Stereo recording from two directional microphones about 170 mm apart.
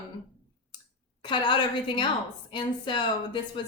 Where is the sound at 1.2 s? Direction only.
30° left (ahead or behind).